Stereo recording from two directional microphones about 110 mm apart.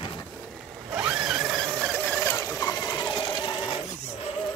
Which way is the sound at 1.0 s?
5° right (ahead or behind).